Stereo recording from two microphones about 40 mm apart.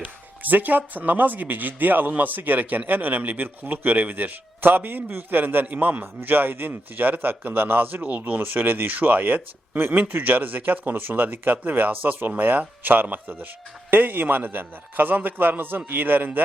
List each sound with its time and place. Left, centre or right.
0.0 s speech: right
5.6 s a man's voice: right